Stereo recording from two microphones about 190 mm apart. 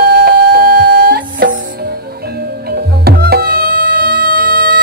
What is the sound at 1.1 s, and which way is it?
Music, 50° right (ahead or behind).